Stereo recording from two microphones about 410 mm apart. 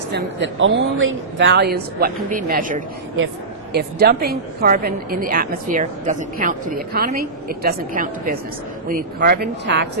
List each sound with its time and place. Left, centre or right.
0.1 s a woman's voice: right